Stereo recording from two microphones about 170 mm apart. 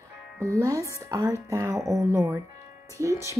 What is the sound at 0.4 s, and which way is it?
A woman's voice, 20° right (ahead or behind).